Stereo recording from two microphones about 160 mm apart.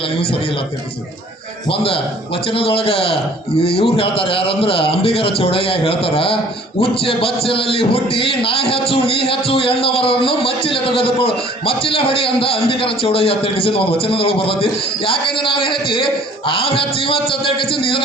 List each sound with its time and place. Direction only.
1.7 s a man's voice: 35° left (ahead or behind)